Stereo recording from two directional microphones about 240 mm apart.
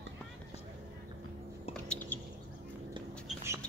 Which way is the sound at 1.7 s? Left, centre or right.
Centre.